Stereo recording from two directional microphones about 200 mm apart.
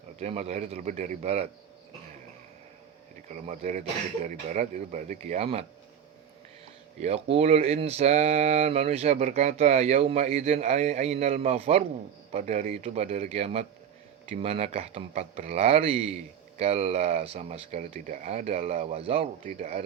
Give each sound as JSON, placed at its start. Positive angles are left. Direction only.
{"t": 0.2, "sound": "speech", "side_deg": -35}
{"t": 3.2, "sound": "speech", "side_deg": -35}
{"t": 7.0, "sound": "speech", "side_deg": -30}